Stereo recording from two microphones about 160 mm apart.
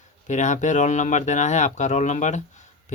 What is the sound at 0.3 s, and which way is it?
Speech, 50° left (ahead or behind).